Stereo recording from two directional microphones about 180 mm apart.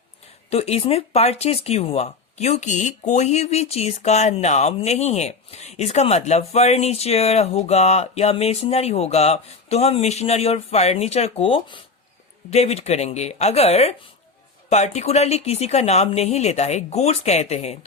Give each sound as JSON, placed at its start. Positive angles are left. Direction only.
{"t": 0.5, "sound": "speech", "side_deg": 35}